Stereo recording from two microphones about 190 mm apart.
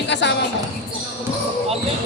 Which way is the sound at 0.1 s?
70° left (ahead or behind).